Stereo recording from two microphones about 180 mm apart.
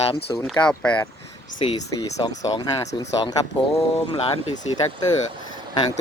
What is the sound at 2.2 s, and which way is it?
Speech, 20° left (ahead or behind).